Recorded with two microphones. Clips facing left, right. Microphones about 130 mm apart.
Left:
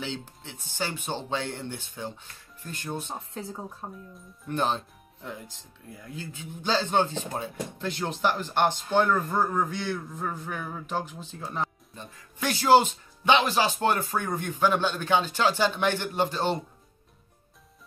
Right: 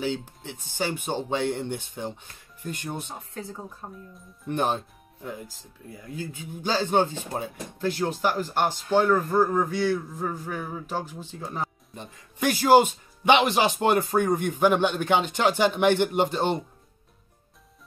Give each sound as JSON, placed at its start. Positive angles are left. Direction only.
{"t": 0.0, "sound": "speech", "side_deg": -10}
{"t": 4.5, "sound": "speech", "side_deg": -15}
{"t": 5.4, "sound": "a man's voice", "side_deg": 0}
{"t": 11.9, "sound": "speech", "side_deg": -15}